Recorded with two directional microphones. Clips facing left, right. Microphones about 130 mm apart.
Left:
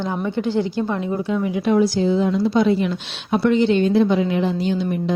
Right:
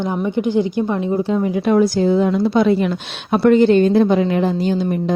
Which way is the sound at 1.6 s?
50° right (ahead or behind).